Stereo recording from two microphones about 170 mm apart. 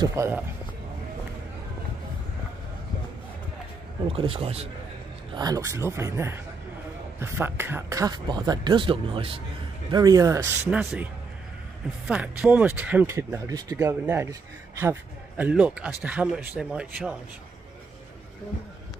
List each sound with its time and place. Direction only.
0.0 s speech: 15° right (ahead or behind)
4.0 s a man's voice: 30° right (ahead or behind)
5.3 s speech: 20° right (ahead or behind)
10.7 s a man's voice: 5° right (ahead or behind)
12.1 s speech: 10° right (ahead or behind)